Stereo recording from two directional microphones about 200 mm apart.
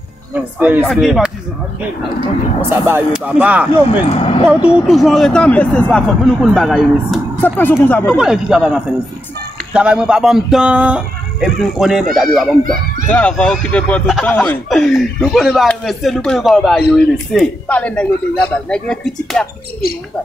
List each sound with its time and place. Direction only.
0.6 s speech: 10° right (ahead or behind)
2.9 s speech: 5° right (ahead or behind)
3.9 s speech: 25° left (ahead or behind)
4.6 s speech: 5° right (ahead or behind)
8.2 s speech: 5° right (ahead or behind)